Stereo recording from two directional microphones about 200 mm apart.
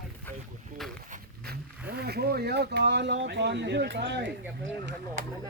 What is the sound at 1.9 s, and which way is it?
Speech, 50° right (ahead or behind).